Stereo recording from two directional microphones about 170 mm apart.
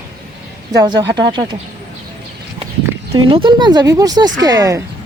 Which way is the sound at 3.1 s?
30° right (ahead or behind).